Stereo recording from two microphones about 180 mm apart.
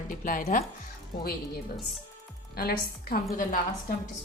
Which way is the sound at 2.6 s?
55° left (ahead or behind).